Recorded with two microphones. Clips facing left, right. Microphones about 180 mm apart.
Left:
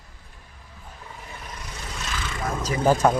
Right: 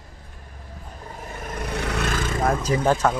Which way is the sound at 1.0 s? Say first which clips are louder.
Right 6 dB; 45° right (ahead or behind).